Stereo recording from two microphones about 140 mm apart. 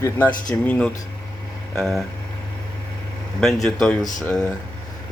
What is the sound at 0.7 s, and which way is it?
Speech, 5° left (ahead or behind).